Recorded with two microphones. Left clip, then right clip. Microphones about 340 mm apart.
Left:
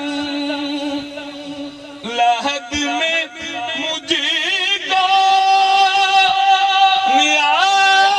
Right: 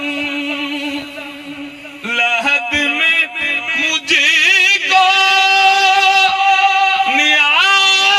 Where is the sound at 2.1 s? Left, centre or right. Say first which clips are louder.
Right 2 dB; left.